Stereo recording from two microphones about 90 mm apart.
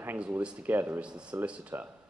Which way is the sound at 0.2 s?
10° right (ahead or behind).